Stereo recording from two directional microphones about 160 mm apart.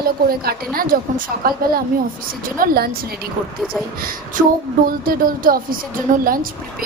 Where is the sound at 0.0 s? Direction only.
70° right (ahead or behind).